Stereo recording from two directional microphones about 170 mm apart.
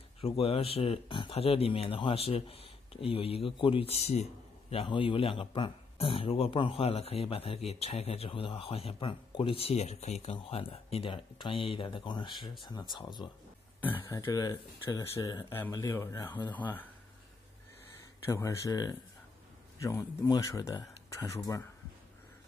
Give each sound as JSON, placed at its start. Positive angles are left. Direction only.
{"t": 0.2, "sound": "speech", "side_deg": 35}
{"t": 13.7, "sound": "speech", "side_deg": 10}
{"t": 18.2, "sound": "speech", "side_deg": 20}